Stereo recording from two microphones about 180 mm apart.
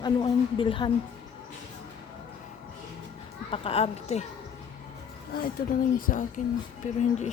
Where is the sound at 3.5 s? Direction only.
30° left (ahead or behind).